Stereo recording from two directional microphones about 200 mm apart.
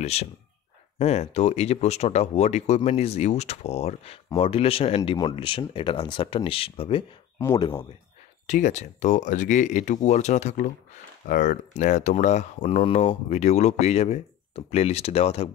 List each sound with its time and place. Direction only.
0.0 s speech: 30° left (ahead or behind)
8.5 s speech: 35° left (ahead or behind)